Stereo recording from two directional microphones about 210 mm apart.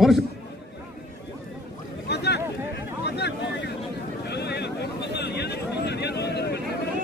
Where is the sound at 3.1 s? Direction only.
50° left (ahead or behind).